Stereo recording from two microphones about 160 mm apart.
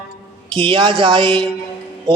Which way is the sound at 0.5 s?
30° right (ahead or behind).